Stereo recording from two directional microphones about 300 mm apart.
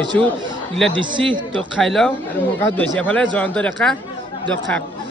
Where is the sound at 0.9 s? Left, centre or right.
Centre.